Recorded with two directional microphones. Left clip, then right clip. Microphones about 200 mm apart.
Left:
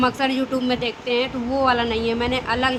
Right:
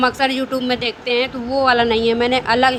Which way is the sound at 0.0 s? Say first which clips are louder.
Right 4 dB; 25° right (ahead or behind).